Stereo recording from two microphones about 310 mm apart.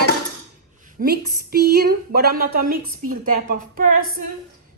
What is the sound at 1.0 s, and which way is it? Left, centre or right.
A woman's voice, right.